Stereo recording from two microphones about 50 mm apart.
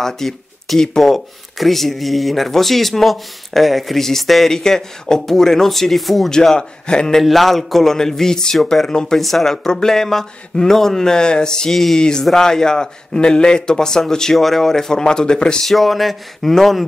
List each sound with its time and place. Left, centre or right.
0.0 s speech: centre
6.3 s speech: centre
7.2 s speech: centre
11.7 s speech: centre
12.0 s speech: centre
15.6 s speech: centre